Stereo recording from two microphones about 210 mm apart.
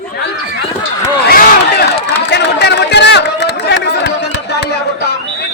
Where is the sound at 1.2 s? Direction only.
45° left (ahead or behind).